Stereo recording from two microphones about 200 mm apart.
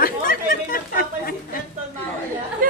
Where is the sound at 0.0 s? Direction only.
45° left (ahead or behind).